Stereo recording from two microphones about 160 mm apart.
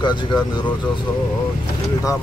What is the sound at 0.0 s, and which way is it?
Speech, 30° left (ahead or behind).